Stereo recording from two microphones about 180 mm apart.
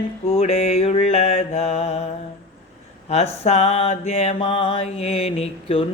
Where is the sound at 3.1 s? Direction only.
35° left (ahead or behind).